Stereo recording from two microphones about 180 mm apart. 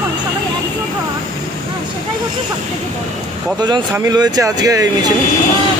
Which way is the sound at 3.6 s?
25° right (ahead or behind).